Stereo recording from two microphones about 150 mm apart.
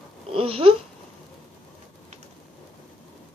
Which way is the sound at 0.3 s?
40° right (ahead or behind).